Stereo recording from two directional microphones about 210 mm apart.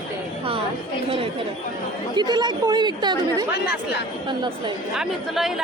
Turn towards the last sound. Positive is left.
turn(degrees=0)  # may be behind; listen again after turning